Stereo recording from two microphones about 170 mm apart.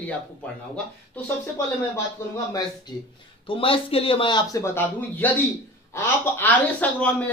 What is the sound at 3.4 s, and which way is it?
Speech, 35° left (ahead or behind).